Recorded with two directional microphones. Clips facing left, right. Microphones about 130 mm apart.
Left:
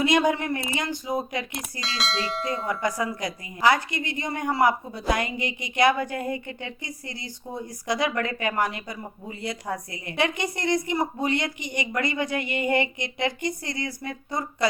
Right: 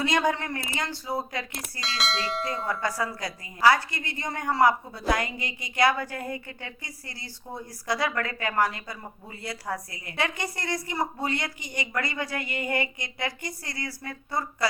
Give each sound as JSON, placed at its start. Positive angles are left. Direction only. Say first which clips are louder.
{"t": 0.0, "sound": "a woman's voice", "louder": "left 4 dB", "side_deg": 15}
{"t": 1.8, "sound": "speech", "louder": "left 1 dB", "side_deg": 0}
{"t": 2.6, "sound": "a woman's voice", "louder": "left 3 dB", "side_deg": 15}